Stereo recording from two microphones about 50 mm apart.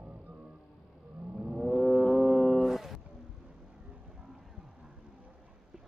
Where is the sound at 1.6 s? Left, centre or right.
Centre.